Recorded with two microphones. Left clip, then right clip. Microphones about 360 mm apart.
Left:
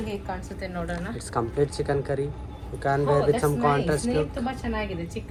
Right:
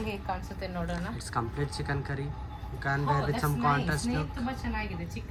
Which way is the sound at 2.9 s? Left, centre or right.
Centre.